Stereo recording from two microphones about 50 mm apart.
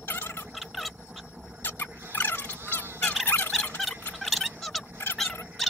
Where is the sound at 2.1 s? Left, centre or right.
Left.